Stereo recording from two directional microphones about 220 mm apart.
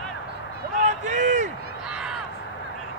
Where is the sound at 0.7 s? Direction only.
35° right (ahead or behind).